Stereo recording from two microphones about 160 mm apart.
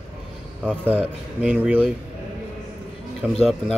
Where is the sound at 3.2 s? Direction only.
Centre (ahead or behind).